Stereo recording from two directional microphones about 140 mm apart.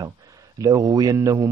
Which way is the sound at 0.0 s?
25° right (ahead or behind).